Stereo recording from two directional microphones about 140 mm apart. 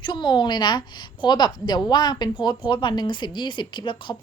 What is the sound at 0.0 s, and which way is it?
A woman's voice, 35° left (ahead or behind).